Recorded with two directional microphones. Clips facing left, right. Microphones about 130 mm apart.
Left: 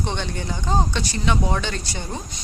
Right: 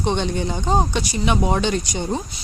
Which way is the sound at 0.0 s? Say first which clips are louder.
Right 6 dB; 20° right (ahead or behind).